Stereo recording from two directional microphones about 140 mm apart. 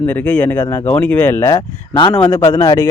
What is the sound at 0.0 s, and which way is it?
Speech, 10° left (ahead or behind).